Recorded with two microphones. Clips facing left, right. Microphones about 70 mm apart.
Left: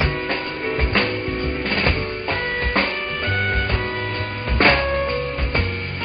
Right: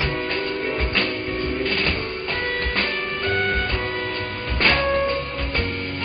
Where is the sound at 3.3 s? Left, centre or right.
Centre.